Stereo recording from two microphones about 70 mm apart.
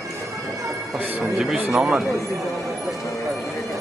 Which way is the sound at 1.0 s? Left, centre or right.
Right.